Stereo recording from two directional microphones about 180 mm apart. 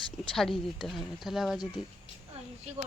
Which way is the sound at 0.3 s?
Centre (ahead or behind).